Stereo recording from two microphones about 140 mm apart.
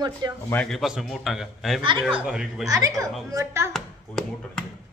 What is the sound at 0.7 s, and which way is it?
A woman's voice, centre (ahead or behind).